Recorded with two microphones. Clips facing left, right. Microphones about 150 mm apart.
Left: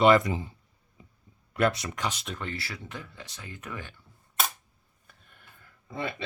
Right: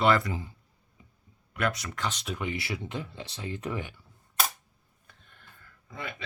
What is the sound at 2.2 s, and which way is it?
Speech, 10° right (ahead or behind).